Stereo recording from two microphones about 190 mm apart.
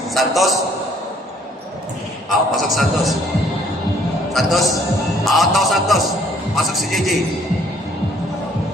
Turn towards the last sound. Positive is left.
turn(degrees=0)  # may be behind; listen again after turning